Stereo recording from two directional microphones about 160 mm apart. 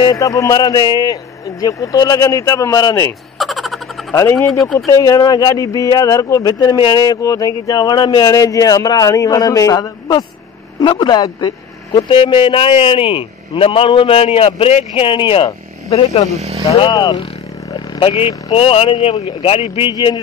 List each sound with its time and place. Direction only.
0.0 s speech: 20° left (ahead or behind)
3.3 s a sound: centre (ahead or behind)
4.1 s speech: 20° left (ahead or behind); by 16.3 s 45° left (ahead or behind)
16.3 s speech: 40° right (ahead or behind)
16.6 s speech: 30° left (ahead or behind)